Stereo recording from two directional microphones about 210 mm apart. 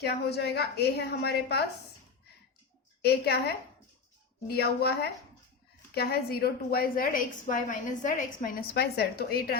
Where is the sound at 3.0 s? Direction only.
50° left (ahead or behind).